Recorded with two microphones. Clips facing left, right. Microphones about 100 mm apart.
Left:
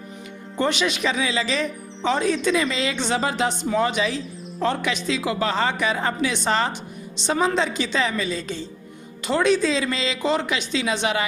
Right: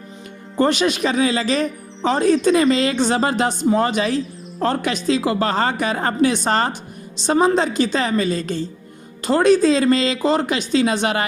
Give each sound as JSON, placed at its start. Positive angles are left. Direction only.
{"t": 0.6, "sound": "speech", "side_deg": -40}